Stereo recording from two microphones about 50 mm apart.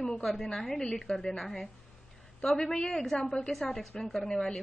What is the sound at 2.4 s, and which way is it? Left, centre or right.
A woman's voice, centre.